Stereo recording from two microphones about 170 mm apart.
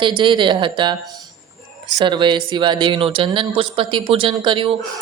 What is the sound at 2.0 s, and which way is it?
Speech, 30° right (ahead or behind).